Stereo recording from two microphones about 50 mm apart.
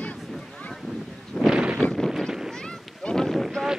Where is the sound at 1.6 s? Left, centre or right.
Centre.